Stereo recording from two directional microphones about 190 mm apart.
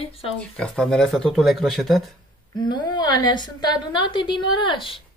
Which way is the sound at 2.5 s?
20° left (ahead or behind).